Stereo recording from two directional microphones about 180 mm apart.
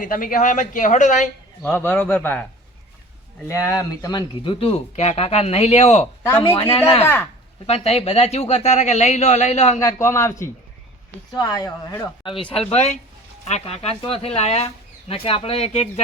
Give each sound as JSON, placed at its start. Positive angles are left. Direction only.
{"t": 0.0, "sound": "speech", "side_deg": 50}
{"t": 1.6, "sound": "a man's voice", "side_deg": 10}
{"t": 3.5, "sound": "speech", "side_deg": 15}
{"t": 6.2, "sound": "a man's voice", "side_deg": 15}
{"t": 6.7, "sound": "speech", "side_deg": 35}
{"t": 9.8, "sound": "a man's voice", "side_deg": 15}
{"t": 11.3, "sound": "speech", "side_deg": 20}
{"t": 12.5, "sound": "a man's voice", "side_deg": 5}
{"t": 12.7, "sound": "speech", "side_deg": 40}